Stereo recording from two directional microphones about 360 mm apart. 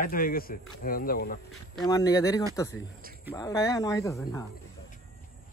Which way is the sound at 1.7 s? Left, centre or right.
Centre.